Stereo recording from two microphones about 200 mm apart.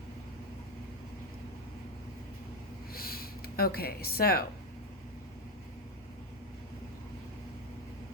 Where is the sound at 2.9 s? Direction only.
50° left (ahead or behind).